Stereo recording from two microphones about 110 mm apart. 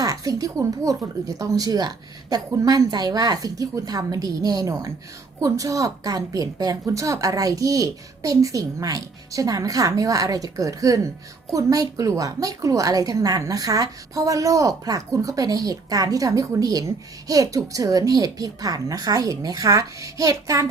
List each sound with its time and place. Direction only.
0.0 s a woman's voice: 35° right (ahead or behind)